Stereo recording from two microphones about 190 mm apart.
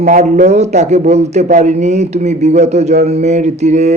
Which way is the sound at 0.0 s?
40° right (ahead or behind).